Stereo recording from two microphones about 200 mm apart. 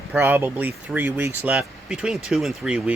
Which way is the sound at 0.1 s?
10° right (ahead or behind).